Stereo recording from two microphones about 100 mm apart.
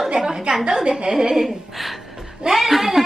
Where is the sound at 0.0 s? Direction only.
5° right (ahead or behind).